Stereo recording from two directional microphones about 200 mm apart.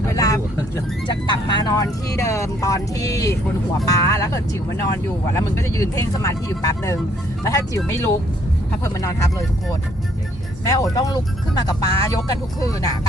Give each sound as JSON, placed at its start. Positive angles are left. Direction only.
{"t": 0.0, "sound": "vehicle", "side_deg": 15}
{"t": 1.0, "sound": "speech", "side_deg": 20}
{"t": 8.8, "sound": "speech", "side_deg": 15}
{"t": 10.7, "sound": "speech", "side_deg": 15}